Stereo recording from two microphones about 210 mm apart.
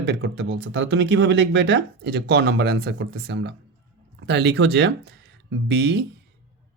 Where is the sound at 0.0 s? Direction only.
55° right (ahead or behind).